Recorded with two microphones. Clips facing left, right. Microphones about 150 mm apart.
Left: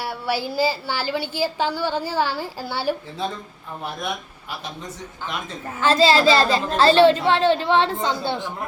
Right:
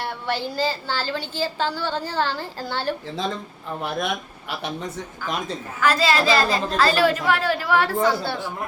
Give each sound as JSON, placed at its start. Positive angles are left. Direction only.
{"t": 0.0, "sound": "a woman's voice", "side_deg": 10}
{"t": 3.8, "sound": "speech", "side_deg": -75}
{"t": 5.2, "sound": "a child's voice", "side_deg": 25}